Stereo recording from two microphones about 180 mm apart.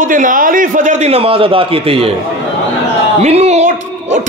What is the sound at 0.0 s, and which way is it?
A man's voice, 45° right (ahead or behind).